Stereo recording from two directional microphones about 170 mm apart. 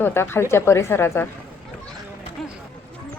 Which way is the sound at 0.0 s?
15° left (ahead or behind).